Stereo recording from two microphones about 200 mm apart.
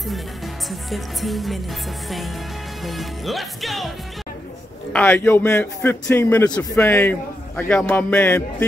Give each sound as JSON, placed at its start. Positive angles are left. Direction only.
{"t": 0.7, "sound": "music", "side_deg": 0}
{"t": 4.9, "sound": "a man's voice", "side_deg": 10}